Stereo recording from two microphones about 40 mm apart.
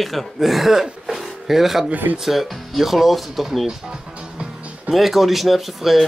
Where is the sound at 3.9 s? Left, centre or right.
Right.